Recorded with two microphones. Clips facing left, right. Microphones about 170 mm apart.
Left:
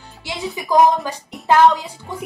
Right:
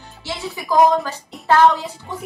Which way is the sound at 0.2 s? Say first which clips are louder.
Left 2 dB; 15° left (ahead or behind).